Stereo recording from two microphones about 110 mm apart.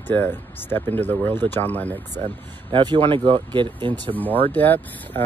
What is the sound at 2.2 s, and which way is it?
Speech, 45° right (ahead or behind).